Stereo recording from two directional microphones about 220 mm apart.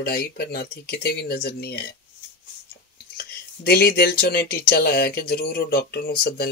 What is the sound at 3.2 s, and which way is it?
Speech, 45° left (ahead or behind).